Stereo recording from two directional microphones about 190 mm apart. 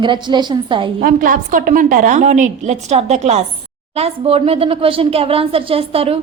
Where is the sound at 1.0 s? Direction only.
45° right (ahead or behind); by 6.2 s 30° right (ahead or behind).